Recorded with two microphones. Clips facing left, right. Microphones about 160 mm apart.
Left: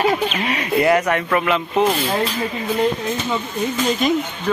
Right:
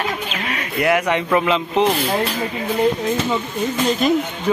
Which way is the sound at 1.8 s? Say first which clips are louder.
Even; centre (ahead or behind).